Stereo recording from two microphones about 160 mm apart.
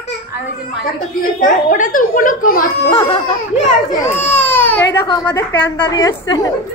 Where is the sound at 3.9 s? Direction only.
15° left (ahead or behind).